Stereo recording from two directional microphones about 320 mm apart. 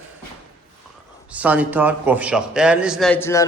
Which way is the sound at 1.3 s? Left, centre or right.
Centre.